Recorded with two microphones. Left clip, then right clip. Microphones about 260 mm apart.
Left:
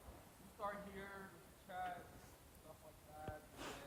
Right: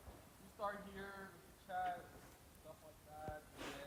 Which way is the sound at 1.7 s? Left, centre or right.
Centre.